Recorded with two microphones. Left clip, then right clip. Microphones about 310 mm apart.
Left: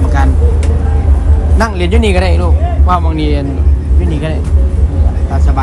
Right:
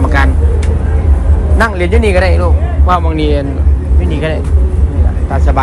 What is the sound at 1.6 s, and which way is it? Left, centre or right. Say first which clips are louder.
A man's voice: right 2 dB; centre.